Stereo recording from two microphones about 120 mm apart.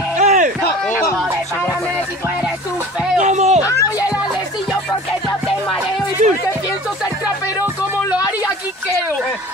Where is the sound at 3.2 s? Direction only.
75° right (ahead or behind).